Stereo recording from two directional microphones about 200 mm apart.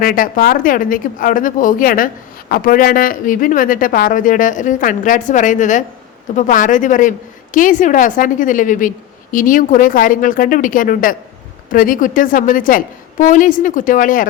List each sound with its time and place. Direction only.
0.0 s a woman's voice: 45° left (ahead or behind)